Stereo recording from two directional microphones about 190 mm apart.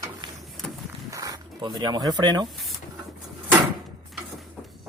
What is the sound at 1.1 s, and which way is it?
Speech, 20° right (ahead or behind).